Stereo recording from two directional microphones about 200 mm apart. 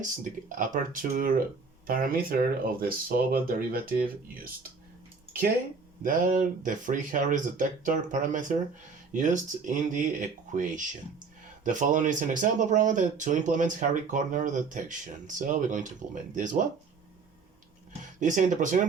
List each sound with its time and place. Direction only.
0.0 s speech: 40° right (ahead or behind)
6.0 s speech: 45° right (ahead or behind)
18.2 s speech: 40° right (ahead or behind)